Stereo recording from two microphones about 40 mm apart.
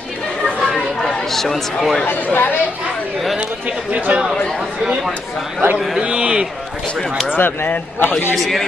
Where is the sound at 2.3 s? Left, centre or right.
Left.